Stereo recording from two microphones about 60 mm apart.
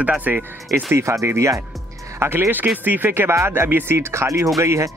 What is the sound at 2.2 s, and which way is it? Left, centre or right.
Speech, right.